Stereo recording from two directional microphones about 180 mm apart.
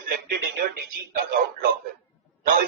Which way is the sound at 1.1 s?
55° right (ahead or behind).